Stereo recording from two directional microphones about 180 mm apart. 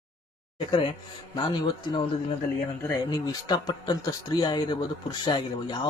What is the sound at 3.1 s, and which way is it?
A man's voice, 25° left (ahead or behind).